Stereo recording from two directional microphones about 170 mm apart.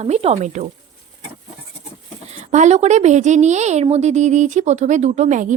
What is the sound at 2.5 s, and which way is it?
Speech, 45° right (ahead or behind).